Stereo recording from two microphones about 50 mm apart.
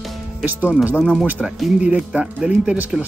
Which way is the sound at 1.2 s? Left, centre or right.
Right.